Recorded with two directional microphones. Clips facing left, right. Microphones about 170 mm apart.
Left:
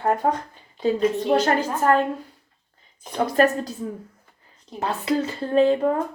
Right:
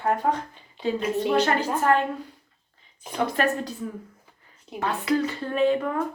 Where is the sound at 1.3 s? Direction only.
40° left (ahead or behind).